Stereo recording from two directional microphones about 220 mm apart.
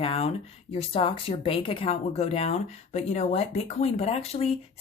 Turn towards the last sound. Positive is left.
turn(degrees=25)  # may be behind; listen again after turning